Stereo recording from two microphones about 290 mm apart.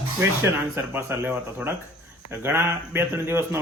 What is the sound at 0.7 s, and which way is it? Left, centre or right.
Speech, centre.